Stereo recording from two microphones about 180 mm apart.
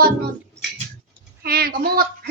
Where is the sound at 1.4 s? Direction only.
55° right (ahead or behind).